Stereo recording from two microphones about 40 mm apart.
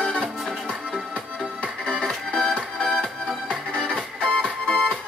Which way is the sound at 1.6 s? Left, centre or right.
Left.